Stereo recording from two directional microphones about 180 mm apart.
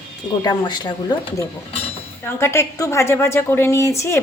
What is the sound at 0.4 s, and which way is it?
Cutlery, 25° left (ahead or behind).